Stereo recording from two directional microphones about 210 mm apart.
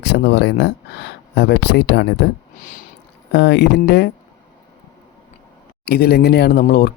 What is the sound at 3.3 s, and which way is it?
Speech, 55° left (ahead or behind).